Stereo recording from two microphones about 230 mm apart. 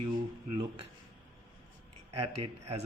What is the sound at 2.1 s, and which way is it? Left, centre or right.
Speech, right.